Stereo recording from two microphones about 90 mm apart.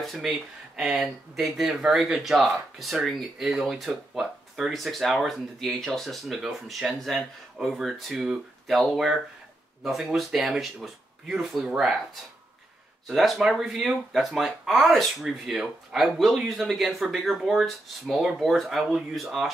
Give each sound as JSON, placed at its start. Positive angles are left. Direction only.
{"t": 0.0, "sound": "speech", "side_deg": 0}
{"t": 13.0, "sound": "speech", "side_deg": 0}